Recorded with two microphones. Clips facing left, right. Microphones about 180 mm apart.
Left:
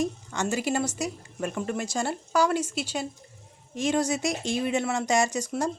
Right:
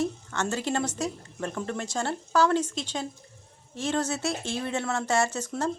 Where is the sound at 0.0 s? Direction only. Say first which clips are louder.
Left 1 dB; 15° left (ahead or behind).